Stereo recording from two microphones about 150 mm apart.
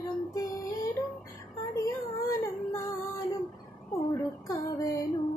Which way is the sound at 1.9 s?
20° left (ahead or behind).